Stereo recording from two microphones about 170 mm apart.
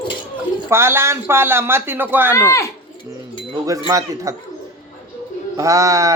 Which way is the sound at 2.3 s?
15° left (ahead or behind).